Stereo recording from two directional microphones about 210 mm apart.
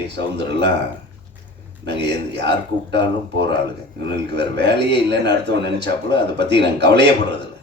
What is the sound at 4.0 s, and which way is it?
A man's voice, 55° right (ahead or behind).